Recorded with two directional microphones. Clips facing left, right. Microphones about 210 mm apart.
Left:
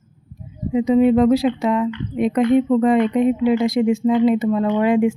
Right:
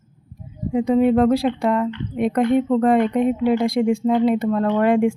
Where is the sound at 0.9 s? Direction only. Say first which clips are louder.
Left 2 dB; centre (ahead or behind).